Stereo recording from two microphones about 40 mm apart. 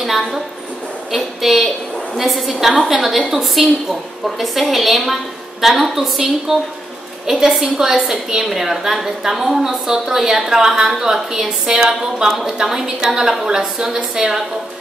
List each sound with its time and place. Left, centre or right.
0.0 s a woman's voice: centre